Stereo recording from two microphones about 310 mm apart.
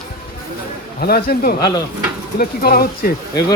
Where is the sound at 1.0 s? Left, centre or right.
Left.